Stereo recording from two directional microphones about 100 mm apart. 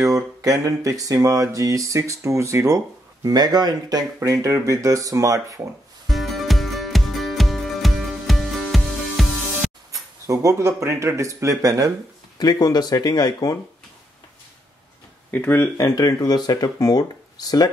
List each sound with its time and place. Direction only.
0.0 s speech: 35° right (ahead or behind)
4.2 s speech: 30° right (ahead or behind)
6.0 s music: centre (ahead or behind)
9.9 s speech: 35° right (ahead or behind)
12.4 s speech: 45° left (ahead or behind)
15.3 s speech: 20° left (ahead or behind)
15.8 s speech: 40° left (ahead or behind)